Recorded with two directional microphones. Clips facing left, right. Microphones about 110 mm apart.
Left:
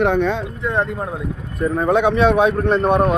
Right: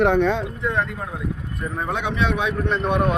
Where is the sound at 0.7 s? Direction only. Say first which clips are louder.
Left 4 dB; 30° left (ahead or behind).